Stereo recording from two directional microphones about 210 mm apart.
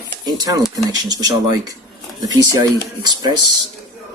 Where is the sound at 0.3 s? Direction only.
20° right (ahead or behind).